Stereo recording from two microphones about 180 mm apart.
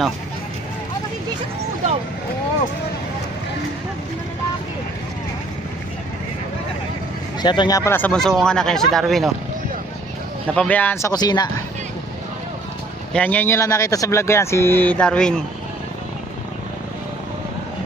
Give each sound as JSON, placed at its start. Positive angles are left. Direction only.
{"t": 7.4, "sound": "speech", "side_deg": 25}
{"t": 10.5, "sound": "speech", "side_deg": 5}
{"t": 13.1, "sound": "speech", "side_deg": 10}